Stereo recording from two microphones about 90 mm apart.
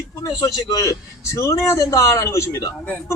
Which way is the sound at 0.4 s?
40° left (ahead or behind).